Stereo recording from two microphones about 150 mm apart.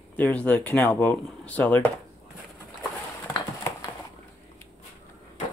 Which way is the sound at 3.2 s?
20° left (ahead or behind).